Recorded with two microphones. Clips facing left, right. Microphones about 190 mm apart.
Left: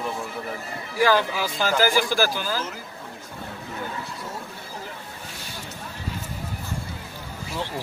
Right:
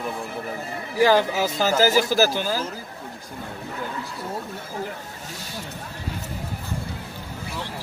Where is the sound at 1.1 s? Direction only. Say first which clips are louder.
Right 3 dB; 45° right (ahead or behind).